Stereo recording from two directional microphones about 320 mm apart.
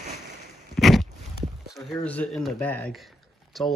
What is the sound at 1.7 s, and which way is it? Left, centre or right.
Speech, centre.